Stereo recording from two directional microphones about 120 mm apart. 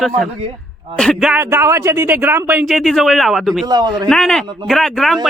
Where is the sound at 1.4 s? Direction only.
20° right (ahead or behind).